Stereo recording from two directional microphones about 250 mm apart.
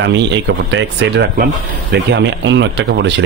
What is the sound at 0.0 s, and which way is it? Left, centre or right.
Speech, right.